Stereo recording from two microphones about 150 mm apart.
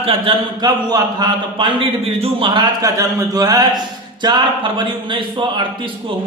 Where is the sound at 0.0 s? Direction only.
35° right (ahead or behind).